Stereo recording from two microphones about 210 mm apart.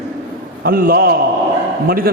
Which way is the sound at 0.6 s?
45° right (ahead or behind).